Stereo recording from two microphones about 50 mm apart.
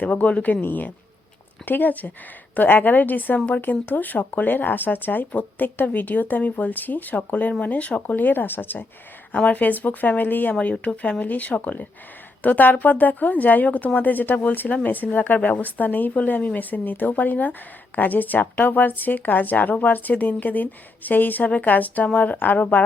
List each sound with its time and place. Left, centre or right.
0.0 s speech: left
0.6 s a woman's voice: left
9.3 s a woman's voice: left
10.5 s a woman's voice: left